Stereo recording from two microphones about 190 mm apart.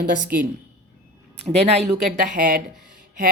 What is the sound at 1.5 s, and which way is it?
Speech, 35° right (ahead or behind).